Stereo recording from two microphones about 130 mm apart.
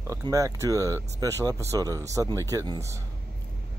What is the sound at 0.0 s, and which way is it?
Speech, 25° right (ahead or behind).